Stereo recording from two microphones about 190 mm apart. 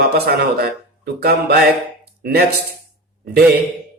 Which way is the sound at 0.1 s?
55° right (ahead or behind).